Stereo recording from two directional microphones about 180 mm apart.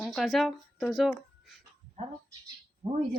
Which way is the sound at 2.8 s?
35° right (ahead or behind).